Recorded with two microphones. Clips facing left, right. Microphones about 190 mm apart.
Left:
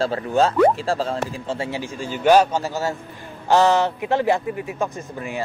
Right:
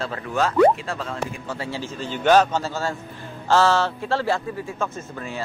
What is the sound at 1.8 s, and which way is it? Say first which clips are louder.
A man's voice: left 1 dB; 10° left (ahead or behind).